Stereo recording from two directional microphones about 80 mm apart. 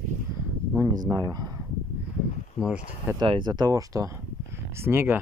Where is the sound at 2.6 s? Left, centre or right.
Centre.